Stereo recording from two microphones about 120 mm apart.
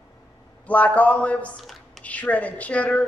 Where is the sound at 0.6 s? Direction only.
15° left (ahead or behind).